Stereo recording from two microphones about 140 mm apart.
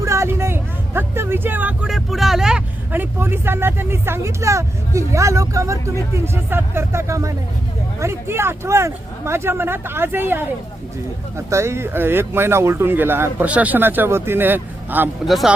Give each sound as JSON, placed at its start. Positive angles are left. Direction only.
{"t": 0.0, "sound": "vehicle", "side_deg": -20}
{"t": 1.9, "sound": "speech", "side_deg": 0}
{"t": 15.3, "sound": "speech", "side_deg": 0}